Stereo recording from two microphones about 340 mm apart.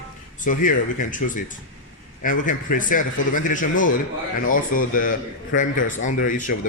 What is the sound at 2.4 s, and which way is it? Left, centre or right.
A man's voice, left.